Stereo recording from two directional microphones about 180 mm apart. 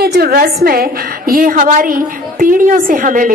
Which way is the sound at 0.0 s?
60° right (ahead or behind).